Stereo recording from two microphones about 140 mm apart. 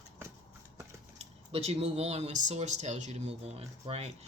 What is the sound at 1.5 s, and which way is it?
Speech, 50° right (ahead or behind).